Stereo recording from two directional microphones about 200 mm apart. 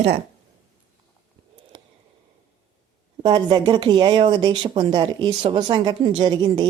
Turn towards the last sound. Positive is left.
turn(degrees=-20)  # may be behind; listen again after turning